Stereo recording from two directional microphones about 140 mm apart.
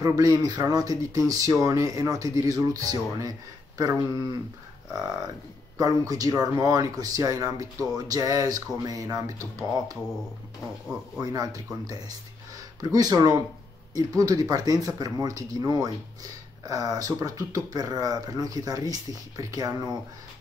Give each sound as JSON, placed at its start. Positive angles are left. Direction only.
{"t": 0.0, "sound": "speech", "side_deg": -25}
{"t": 5.8, "sound": "speech", "side_deg": -25}
{"t": 11.1, "sound": "speech", "side_deg": -25}
{"t": 12.9, "sound": "speech", "side_deg": -25}